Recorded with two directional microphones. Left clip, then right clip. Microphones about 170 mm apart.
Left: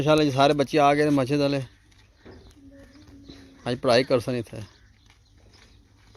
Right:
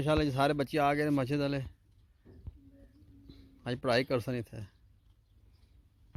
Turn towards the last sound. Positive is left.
turn(degrees=-5)  # may be behind; listen again after turning